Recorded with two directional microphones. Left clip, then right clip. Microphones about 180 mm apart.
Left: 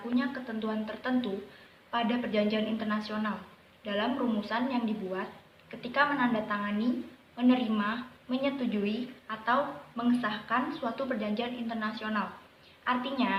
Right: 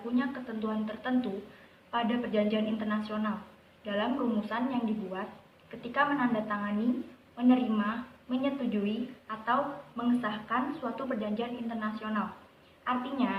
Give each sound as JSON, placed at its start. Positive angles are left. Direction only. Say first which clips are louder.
{"t": 0.2, "sound": "a woman's voice", "louder": "even", "side_deg": 15}